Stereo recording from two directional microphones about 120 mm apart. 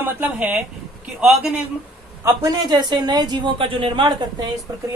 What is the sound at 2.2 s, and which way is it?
Speech, 35° right (ahead or behind).